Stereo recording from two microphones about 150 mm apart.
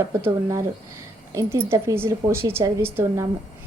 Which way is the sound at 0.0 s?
20° right (ahead or behind).